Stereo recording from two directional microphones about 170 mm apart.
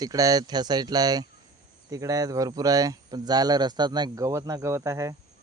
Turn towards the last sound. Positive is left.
turn(degrees=-15)  # may be behind; listen again after turning